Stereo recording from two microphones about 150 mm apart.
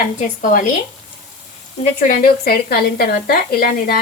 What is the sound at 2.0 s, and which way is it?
Speech, 65° left (ahead or behind).